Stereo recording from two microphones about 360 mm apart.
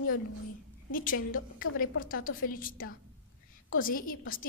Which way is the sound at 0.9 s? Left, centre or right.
Left.